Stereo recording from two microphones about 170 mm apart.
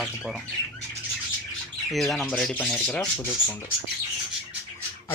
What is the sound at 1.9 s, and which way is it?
Speech, centre (ahead or behind).